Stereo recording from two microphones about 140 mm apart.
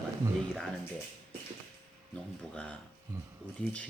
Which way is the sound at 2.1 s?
5° left (ahead or behind).